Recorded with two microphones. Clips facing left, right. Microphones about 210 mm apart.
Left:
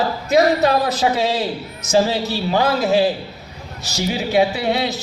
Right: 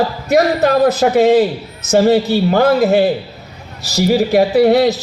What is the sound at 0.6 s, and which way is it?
A man's voice, 55° right (ahead or behind).